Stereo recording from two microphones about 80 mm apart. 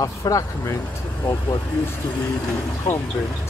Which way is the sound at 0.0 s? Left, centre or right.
Left.